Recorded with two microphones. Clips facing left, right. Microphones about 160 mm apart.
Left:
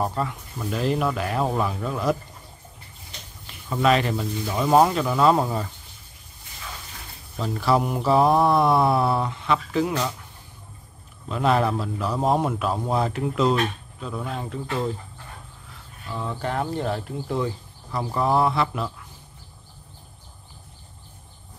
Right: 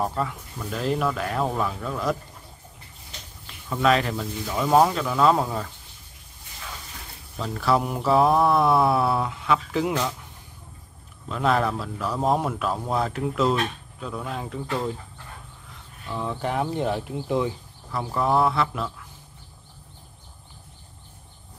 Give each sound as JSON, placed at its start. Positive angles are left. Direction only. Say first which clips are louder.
{"t": 0.0, "sound": "a man's voice", "louder": "left 1 dB", "side_deg": 0}
{"t": 3.7, "sound": "a man's voice", "louder": "left 1 dB", "side_deg": 0}
{"t": 7.3, "sound": "a man's voice", "louder": "left 1 dB", "side_deg": 5}
{"t": 11.2, "sound": "a man's voice", "louder": "left 1 dB", "side_deg": 0}
{"t": 16.2, "sound": "speech", "louder": "right 1 dB", "side_deg": -15}
{"t": 17.9, "sound": "a man's voice", "louder": "left 1 dB", "side_deg": 0}